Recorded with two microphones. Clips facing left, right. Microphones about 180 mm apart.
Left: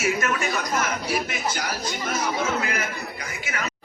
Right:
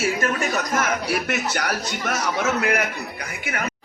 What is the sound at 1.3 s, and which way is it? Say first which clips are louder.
A man's voice: right 4 dB; 70° right (ahead or behind).